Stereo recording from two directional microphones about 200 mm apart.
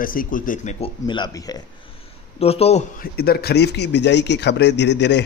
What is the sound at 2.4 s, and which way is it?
Speech, 30° left (ahead or behind).